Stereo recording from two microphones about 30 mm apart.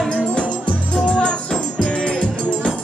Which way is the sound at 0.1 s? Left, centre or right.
Left.